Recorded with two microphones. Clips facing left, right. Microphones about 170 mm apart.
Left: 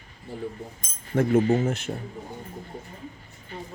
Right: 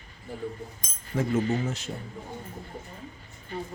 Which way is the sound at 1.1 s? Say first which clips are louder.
Left 5 dB; 55° left (ahead or behind).